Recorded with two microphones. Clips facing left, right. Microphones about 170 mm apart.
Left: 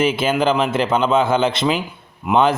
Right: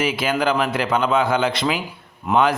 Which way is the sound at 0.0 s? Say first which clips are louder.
Left 3 dB; 25° left (ahead or behind).